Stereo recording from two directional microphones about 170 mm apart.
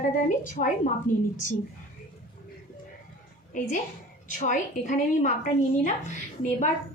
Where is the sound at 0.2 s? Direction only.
50° left (ahead or behind).